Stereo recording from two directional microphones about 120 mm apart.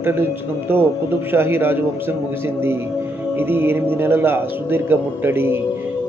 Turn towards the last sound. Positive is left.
turn(degrees=-20)  # may be behind; listen again after turning